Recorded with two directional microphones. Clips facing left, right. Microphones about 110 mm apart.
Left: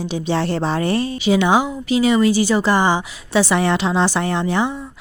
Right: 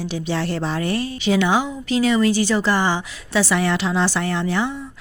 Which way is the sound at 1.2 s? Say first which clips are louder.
Left 2 dB; 15° left (ahead or behind).